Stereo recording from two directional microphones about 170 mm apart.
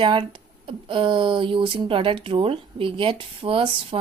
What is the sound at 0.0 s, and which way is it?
Speech, 30° right (ahead or behind).